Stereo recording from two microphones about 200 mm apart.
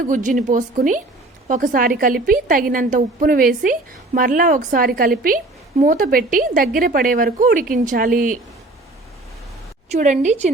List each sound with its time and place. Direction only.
0.0 s a woman's voice: 40° right (ahead or behind)
9.9 s speech: 35° right (ahead or behind)